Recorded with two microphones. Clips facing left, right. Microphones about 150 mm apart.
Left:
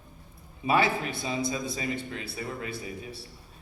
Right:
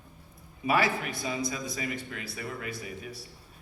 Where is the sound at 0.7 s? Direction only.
25° left (ahead or behind).